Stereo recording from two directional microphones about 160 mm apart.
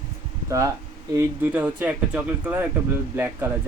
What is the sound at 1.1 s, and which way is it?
Speech, 10° right (ahead or behind).